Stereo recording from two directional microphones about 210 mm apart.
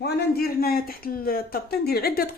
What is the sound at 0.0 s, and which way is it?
Speech, 45° left (ahead or behind).